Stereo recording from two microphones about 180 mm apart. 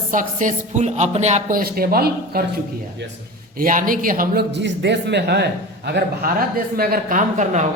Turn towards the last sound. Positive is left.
turn(degrees=-40)  # may be behind; listen again after turning